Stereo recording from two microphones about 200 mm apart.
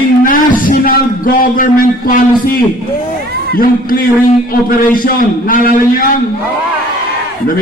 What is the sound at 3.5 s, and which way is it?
A man's voice, 45° left (ahead or behind).